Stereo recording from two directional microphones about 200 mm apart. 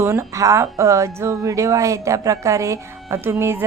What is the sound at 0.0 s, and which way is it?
Speech, 15° right (ahead or behind).